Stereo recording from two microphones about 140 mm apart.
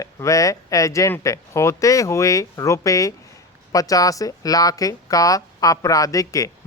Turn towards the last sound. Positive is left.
turn(degrees=25)  # may be behind; listen again after turning